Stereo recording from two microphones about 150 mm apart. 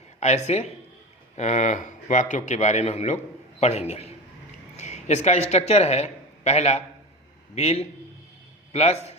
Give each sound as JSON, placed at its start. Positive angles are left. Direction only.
{"t": 0.2, "sound": "a man's voice", "side_deg": 50}